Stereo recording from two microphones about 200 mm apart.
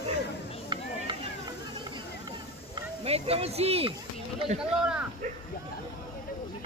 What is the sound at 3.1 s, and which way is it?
Speech, 30° right (ahead or behind).